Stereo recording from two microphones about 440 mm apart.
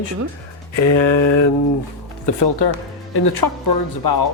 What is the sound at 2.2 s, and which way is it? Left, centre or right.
Speech, left.